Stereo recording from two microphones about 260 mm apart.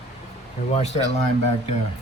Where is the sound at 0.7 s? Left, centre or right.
Left.